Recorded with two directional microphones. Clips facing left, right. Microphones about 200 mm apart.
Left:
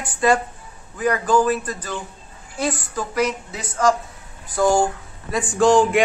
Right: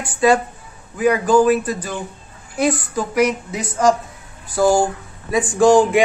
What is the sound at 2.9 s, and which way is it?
Speech, 15° right (ahead or behind).